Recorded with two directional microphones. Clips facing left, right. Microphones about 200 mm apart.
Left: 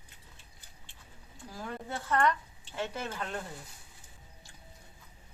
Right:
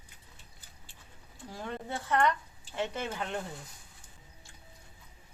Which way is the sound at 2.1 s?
20° right (ahead or behind).